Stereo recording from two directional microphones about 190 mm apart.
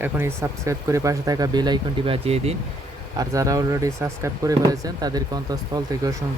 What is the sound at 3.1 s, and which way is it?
Speech, 15° right (ahead or behind).